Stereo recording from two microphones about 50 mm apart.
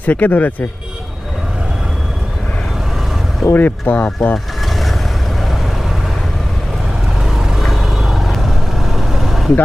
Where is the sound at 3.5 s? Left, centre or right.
Left.